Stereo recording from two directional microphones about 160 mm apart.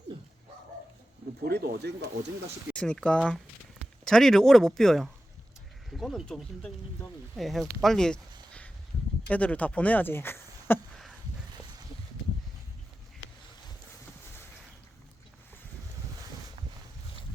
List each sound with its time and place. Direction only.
1.5 s speech: 75° right (ahead or behind)
2.7 s speech: 5° left (ahead or behind)